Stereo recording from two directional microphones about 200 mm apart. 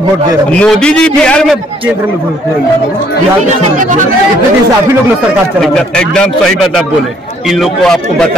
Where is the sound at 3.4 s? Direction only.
40° right (ahead or behind).